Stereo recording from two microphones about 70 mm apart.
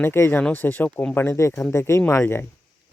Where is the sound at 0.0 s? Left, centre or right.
Left.